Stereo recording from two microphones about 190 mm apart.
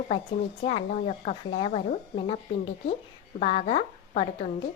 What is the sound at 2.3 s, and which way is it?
Speech, 30° left (ahead or behind).